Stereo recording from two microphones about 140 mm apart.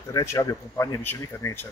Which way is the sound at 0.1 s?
25° left (ahead or behind).